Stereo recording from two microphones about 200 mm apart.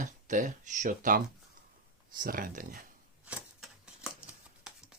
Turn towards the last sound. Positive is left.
turn(degrees=-5)  # may be behind; listen again after turning